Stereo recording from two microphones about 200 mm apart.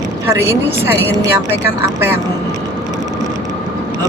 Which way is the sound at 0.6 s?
10° right (ahead or behind).